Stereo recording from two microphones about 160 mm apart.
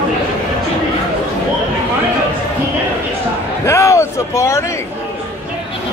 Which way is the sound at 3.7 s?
15° left (ahead or behind).